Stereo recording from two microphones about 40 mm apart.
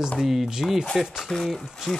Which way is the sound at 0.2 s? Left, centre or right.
Centre.